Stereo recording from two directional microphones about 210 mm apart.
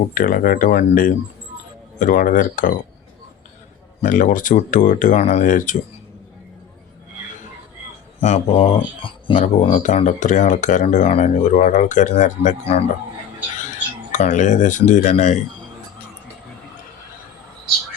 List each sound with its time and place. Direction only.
0.1 s speech: 40° left (ahead or behind)
4.0 s speech: 40° left (ahead or behind)
8.2 s speech: 30° left (ahead or behind)